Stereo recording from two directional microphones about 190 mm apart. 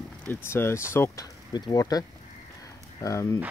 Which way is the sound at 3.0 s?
15° left (ahead or behind).